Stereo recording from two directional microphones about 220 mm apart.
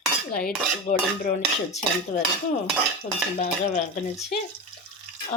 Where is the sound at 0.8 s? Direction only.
35° left (ahead or behind).